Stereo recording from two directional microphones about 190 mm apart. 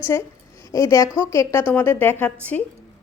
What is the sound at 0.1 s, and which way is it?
A woman's voice, 15° left (ahead or behind).